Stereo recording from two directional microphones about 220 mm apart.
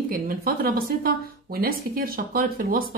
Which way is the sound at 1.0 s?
45° right (ahead or behind).